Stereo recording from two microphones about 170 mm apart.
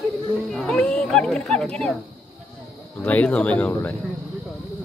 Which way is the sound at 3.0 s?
10° left (ahead or behind).